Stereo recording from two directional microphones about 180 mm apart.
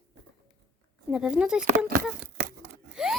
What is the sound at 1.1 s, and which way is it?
Speech, 5° right (ahead or behind).